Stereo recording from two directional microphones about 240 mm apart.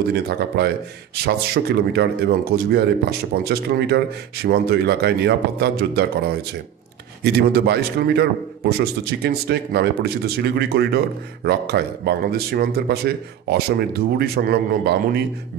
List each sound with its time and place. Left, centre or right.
0.1 s speech: right
7.3 s a man's voice: right